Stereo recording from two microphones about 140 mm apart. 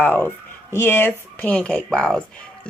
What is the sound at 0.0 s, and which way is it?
Speech, 10° left (ahead or behind).